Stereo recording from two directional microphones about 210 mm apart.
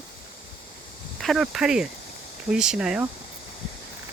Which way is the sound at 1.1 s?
Centre (ahead or behind).